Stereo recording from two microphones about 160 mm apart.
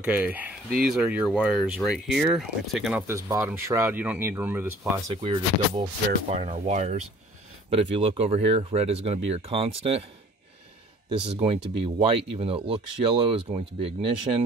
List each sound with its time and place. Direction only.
0.0 s speech: 10° right (ahead or behind)
3.0 s speech: 15° right (ahead or behind)
5.1 s speech: 35° right (ahead or behind)
11.1 s speech: 35° right (ahead or behind)